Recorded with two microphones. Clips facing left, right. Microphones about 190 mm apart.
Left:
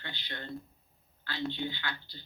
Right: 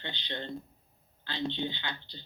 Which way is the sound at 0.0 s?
20° right (ahead or behind).